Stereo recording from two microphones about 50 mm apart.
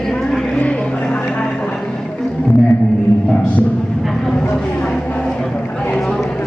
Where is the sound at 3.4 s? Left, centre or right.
Left.